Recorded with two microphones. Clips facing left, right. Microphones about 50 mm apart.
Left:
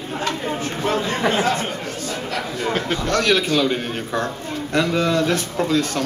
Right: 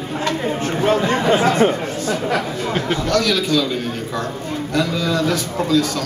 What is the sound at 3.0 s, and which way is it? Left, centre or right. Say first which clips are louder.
A man's voice: left 1 dB; left.